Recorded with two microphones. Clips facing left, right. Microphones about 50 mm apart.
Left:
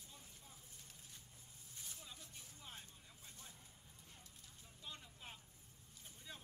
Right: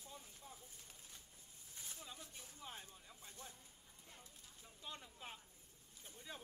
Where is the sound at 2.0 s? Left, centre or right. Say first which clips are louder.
Right 3 dB; centre.